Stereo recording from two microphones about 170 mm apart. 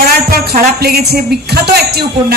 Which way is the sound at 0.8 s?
65° right (ahead or behind).